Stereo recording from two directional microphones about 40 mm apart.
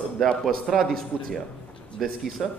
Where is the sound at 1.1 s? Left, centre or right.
Right.